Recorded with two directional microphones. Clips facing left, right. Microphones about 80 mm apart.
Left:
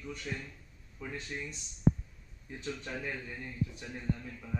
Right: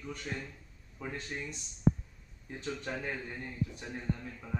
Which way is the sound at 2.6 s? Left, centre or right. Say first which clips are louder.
Right 1 dB; right.